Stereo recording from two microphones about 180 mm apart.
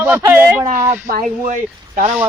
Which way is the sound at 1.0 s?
50° right (ahead or behind).